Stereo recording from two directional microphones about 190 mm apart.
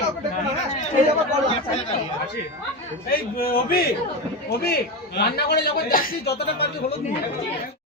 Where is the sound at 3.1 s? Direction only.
50° left (ahead or behind).